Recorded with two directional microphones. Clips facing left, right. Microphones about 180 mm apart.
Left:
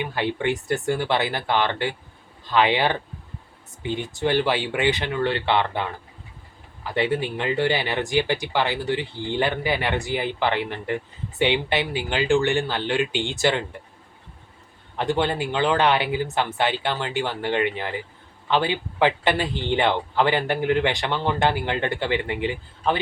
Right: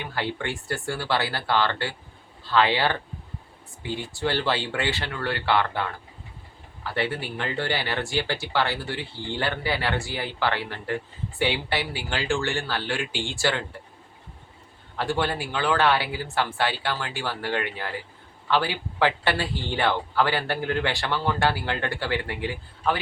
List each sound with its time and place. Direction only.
0.0 s speech: 15° left (ahead or behind)
14.9 s speech: 20° left (ahead or behind)